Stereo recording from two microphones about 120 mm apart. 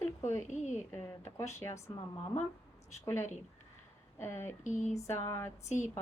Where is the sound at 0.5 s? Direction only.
75° left (ahead or behind).